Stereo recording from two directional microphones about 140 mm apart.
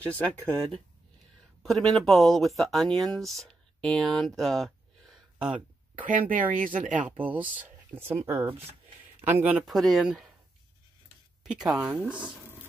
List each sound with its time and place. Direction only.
1.6 s speech: centre (ahead or behind)
6.0 s speech: 80° right
7.1 s speech: 10° right (ahead or behind)
9.7 s speech: centre (ahead or behind)
11.4 s speech: 5° right (ahead or behind)